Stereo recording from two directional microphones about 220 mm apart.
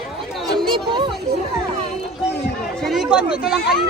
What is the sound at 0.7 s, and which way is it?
Music, 20° right (ahead or behind).